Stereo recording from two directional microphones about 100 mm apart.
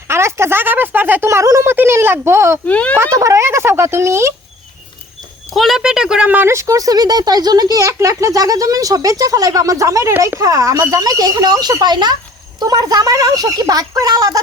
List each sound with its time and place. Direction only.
0.1 s speech: 25° right (ahead or behind)
2.6 s speech: 15° left (ahead or behind)
3.0 s speech: 30° right (ahead or behind)
5.5 s speech: centre (ahead or behind); by 14.3 s 40° right (ahead or behind)